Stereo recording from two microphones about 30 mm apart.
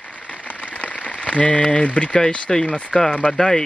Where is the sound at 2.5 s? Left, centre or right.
Centre.